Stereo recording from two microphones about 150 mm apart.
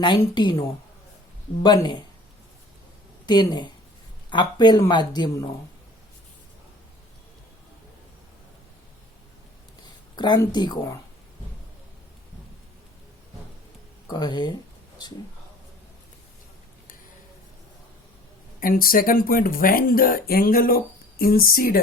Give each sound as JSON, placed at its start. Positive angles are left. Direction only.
{"t": 0.0, "sound": "a woman's voice", "side_deg": 30}
{"t": 1.6, "sound": "speech", "side_deg": 30}
{"t": 3.2, "sound": "speech", "side_deg": 30}
{"t": 10.2, "sound": "speech", "side_deg": 30}
{"t": 14.1, "sound": "speech", "side_deg": 30}
{"t": 18.6, "sound": "speech", "side_deg": 75}